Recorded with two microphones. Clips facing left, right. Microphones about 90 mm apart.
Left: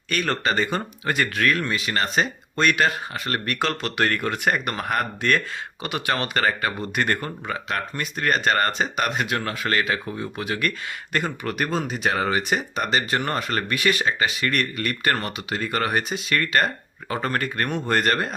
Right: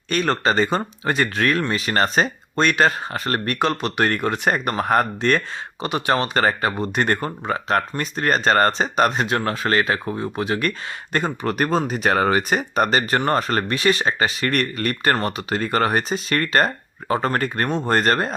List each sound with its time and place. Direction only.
0.1 s speech: 30° right (ahead or behind)
3.6 s speech: 20° right (ahead or behind)